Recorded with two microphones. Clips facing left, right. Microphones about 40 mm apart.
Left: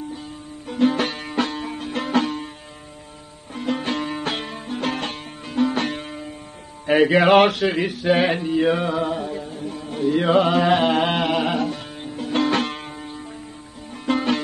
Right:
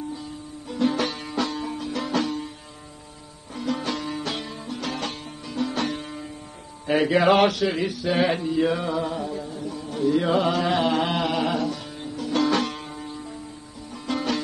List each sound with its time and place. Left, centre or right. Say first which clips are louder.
0.7 s music: left 4 dB; left
3.5 s music: left 3 dB; left
6.9 s a sound: left 4 dB; left
8.8 s music: left 3 dB; left